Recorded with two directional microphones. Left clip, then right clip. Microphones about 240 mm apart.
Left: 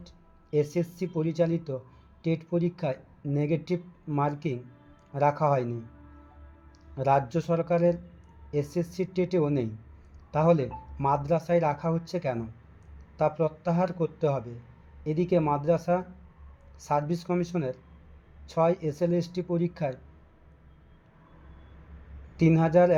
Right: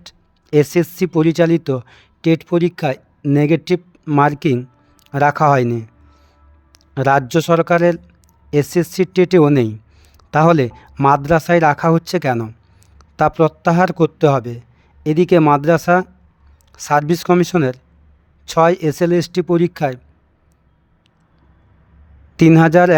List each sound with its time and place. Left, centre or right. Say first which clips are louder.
0.5 s speech: right 13 dB; right
6.9 s speech: right 11 dB; right
22.4 s speech: right 12 dB; right